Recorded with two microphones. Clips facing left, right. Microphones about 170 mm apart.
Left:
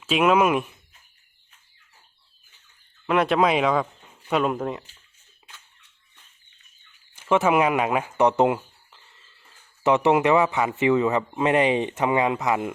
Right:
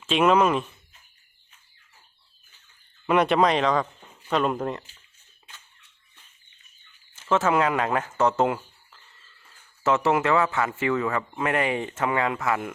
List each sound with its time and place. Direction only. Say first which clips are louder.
0.0 s speech: left 1 dB; 5° left (ahead or behind)
3.1 s speech: even; centre (ahead or behind)
7.2 s a man's voice: left 2 dB; 15° left (ahead or behind)